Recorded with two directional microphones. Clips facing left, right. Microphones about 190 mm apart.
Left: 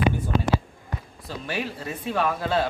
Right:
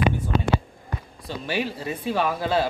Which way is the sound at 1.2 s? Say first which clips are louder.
Right 3 dB; centre (ahead or behind).